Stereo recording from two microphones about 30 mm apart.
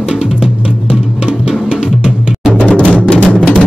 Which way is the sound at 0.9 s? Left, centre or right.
Right.